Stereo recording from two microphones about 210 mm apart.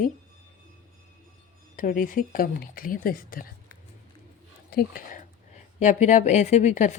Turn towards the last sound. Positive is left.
turn(degrees=35)  # may be behind; listen again after turning